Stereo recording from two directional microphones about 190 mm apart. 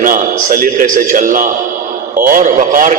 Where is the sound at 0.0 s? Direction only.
45° right (ahead or behind).